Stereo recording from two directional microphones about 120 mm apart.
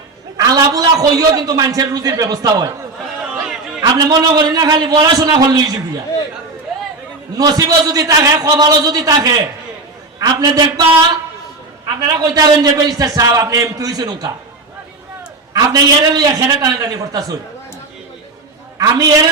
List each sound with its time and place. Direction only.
0.3 s a man's voice: 30° right (ahead or behind)
3.8 s a man's voice: 35° right (ahead or behind)
7.3 s a man's voice: 30° right (ahead or behind)
12.2 s a man's voice: 30° right (ahead or behind)
15.5 s a man's voice: 35° right (ahead or behind)
18.8 s a man's voice: 30° right (ahead or behind)